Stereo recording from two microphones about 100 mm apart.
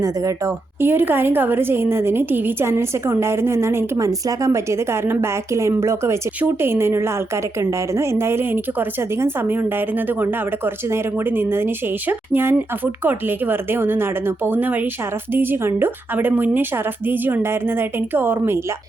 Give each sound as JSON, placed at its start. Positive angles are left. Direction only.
{"t": 0.0, "sound": "a woman's voice", "side_deg": -30}
{"t": 0.9, "sound": "a woman's voice", "side_deg": -20}